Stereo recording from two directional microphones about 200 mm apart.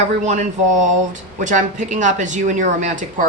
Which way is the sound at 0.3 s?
35° right (ahead or behind).